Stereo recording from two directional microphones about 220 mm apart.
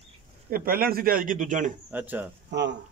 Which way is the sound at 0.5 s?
40° right (ahead or behind).